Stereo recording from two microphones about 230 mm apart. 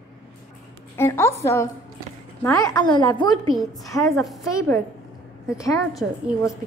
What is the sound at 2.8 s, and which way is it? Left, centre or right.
Speech, centre.